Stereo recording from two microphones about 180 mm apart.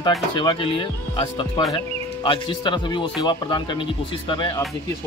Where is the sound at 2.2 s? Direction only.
25° left (ahead or behind).